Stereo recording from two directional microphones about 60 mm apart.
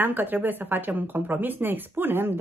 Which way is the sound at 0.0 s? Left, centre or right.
Right.